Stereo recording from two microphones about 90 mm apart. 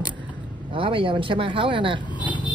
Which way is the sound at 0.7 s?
75° right (ahead or behind).